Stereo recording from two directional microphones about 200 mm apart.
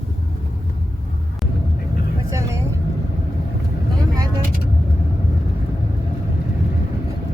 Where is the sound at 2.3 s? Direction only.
15° right (ahead or behind).